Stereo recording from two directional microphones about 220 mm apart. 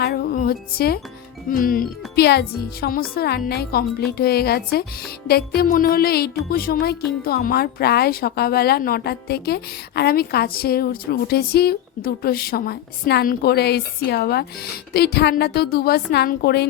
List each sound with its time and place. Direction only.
0.0 s music: 45° left (ahead or behind)
1.5 s speech: 40° left (ahead or behind)